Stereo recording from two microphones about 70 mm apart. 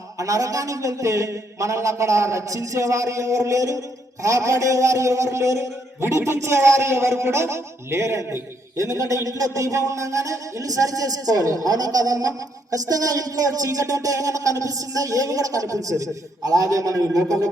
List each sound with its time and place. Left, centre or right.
0.2 s a man's voice: right